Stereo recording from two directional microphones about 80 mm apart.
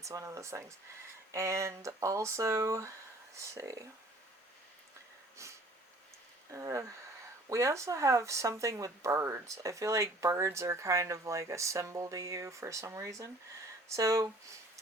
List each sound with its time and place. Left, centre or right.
0.0 s speech: right
5.4 s speech: right